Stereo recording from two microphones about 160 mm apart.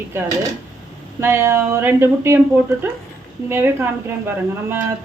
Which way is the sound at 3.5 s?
15° right (ahead or behind).